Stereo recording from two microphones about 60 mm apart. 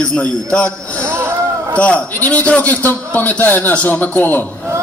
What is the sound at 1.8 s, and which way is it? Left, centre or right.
A man's voice, left.